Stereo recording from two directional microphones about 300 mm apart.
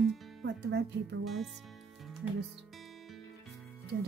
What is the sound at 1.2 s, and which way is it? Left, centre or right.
Speech, centre.